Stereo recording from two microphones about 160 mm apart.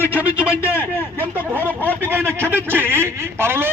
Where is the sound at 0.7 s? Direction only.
15° left (ahead or behind).